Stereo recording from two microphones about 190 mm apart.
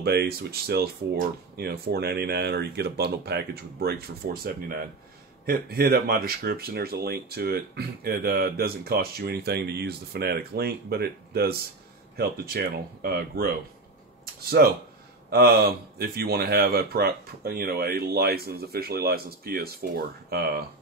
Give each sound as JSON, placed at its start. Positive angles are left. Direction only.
{"t": 0.0, "sound": "speech", "side_deg": -55}
{"t": 15.2, "sound": "speech", "side_deg": -55}